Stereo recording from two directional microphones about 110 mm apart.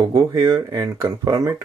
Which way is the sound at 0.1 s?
30° right (ahead or behind).